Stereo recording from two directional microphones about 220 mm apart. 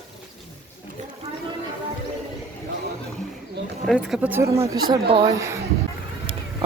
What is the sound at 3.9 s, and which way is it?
Speech, centre (ahead or behind).